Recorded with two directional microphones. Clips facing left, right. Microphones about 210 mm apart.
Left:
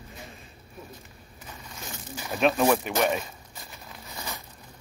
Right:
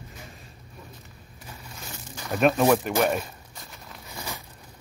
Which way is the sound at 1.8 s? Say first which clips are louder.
Left 3 dB; 5° left (ahead or behind).